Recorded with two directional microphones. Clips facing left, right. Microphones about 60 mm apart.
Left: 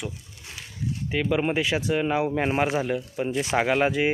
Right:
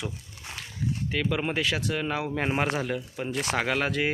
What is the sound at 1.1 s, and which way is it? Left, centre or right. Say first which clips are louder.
Speech: left 5 dB; centre.